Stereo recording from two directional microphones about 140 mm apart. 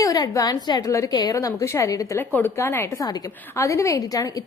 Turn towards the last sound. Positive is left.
turn(degrees=25)  # may be behind; listen again after turning